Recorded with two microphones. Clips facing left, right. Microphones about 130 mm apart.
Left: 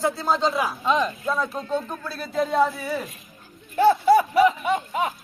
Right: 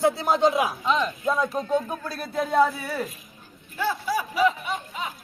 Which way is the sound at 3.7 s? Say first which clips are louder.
Left 10 dB; 60° left (ahead or behind).